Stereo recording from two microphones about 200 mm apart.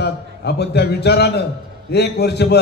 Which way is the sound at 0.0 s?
55° left (ahead or behind).